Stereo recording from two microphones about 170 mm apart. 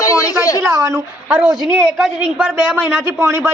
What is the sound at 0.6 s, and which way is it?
A man's voice, 20° right (ahead or behind).